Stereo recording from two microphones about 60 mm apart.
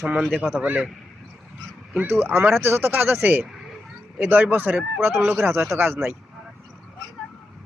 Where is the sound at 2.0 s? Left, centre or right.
Right.